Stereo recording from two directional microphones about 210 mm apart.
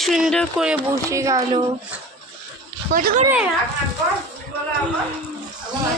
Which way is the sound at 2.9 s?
40° right (ahead or behind).